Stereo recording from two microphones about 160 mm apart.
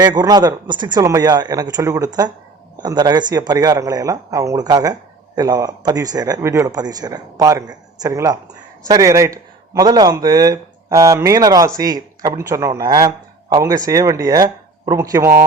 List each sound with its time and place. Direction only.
0.0 s a man's voice: 25° right (ahead or behind)